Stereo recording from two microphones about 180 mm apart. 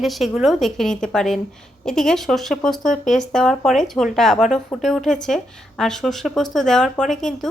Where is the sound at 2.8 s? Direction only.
45° left (ahead or behind).